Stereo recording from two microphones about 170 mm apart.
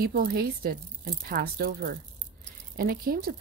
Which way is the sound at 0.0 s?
60° right (ahead or behind).